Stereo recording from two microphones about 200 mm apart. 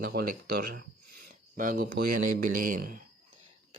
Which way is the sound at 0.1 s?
50° right (ahead or behind).